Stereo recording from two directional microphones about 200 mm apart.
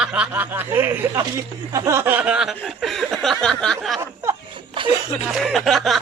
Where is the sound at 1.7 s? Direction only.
15° right (ahead or behind); by 4.0 s centre (ahead or behind).